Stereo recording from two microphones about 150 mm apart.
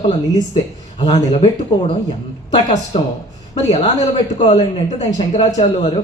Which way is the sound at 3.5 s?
45° left (ahead or behind).